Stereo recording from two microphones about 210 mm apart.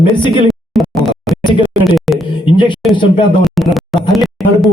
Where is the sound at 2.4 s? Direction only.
25° left (ahead or behind).